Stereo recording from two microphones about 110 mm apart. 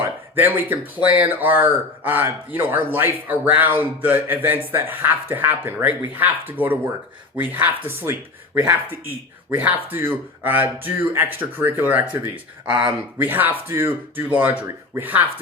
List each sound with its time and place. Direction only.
0.3 s speech: 15° right (ahead or behind)